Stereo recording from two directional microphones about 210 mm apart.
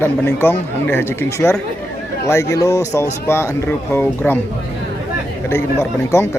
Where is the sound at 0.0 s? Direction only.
10° left (ahead or behind).